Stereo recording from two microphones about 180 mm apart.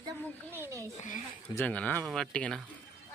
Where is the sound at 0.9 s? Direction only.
45° left (ahead or behind).